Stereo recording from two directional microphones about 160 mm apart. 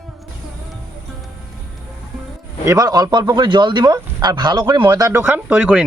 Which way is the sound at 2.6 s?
20° right (ahead or behind).